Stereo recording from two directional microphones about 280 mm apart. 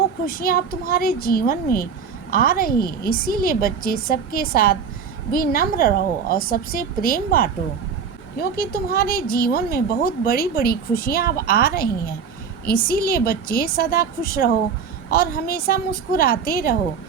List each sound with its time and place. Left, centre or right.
0.3 s speech: left